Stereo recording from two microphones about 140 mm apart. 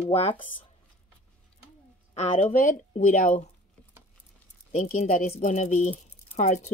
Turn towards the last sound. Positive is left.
turn(degrees=55)  # may be behind; listen again after turning